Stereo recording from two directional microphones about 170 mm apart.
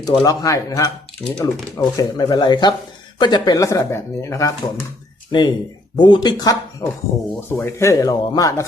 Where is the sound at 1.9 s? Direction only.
25° left (ahead or behind).